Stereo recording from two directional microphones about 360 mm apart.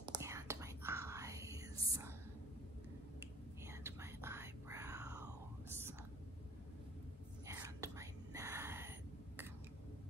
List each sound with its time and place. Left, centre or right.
0.1 s whispering: centre
3.2 s whispering: centre
7.4 s whispering: centre